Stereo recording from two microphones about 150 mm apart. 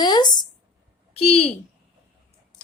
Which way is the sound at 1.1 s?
40° left (ahead or behind).